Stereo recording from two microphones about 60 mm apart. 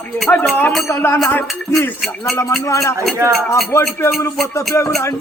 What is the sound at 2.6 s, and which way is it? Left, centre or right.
Speech, left.